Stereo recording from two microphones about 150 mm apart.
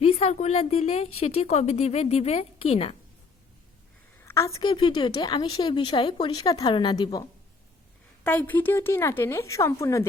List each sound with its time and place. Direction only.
0.0 s a woman's voice: 45° left (ahead or behind)
4.2 s a sound: 20° left (ahead or behind)
4.7 s speech: 35° left (ahead or behind)
8.2 s speech: 10° left (ahead or behind)